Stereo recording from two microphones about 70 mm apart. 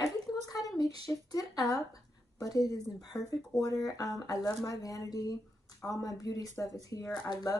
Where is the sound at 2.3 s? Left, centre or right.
Left.